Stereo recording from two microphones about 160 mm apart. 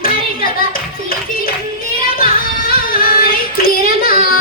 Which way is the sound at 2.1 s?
65° left (ahead or behind).